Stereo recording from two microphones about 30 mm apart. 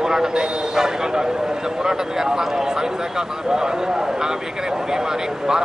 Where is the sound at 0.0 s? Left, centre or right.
Centre.